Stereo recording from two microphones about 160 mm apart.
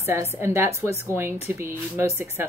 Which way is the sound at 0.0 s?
15° right (ahead or behind).